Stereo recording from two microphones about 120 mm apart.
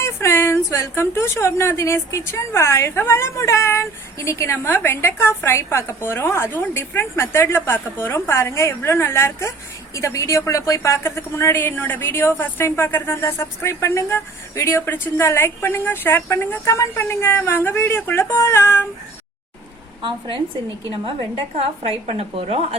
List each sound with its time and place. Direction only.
0.0 s a woman's voice: 20° left (ahead or behind)
20.0 s speech: 40° right (ahead or behind)
21.8 s speech: 55° right (ahead or behind)